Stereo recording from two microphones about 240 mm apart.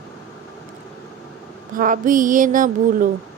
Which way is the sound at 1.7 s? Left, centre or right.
Right.